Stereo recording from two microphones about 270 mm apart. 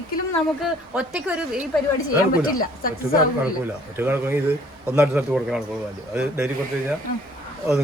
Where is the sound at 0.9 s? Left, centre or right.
Centre.